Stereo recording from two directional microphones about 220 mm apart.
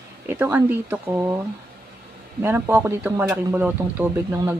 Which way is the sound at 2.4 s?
10° right (ahead or behind).